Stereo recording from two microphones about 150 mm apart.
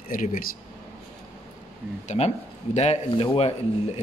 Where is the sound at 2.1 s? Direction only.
50° left (ahead or behind).